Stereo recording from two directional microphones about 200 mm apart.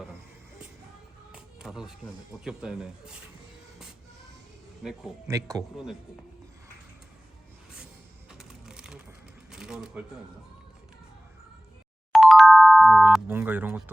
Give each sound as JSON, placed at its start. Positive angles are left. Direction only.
{"t": 1.3, "sound": "music", "side_deg": -5}
{"t": 2.3, "sound": "speech", "side_deg": -5}
{"t": 5.3, "sound": "speech", "side_deg": -20}
{"t": 5.7, "sound": "speech", "side_deg": 0}
{"t": 8.3, "sound": "a sound", "side_deg": -5}
{"t": 9.5, "sound": "shuffling cards", "side_deg": -5}
{"t": 12.1, "sound": "music", "side_deg": 0}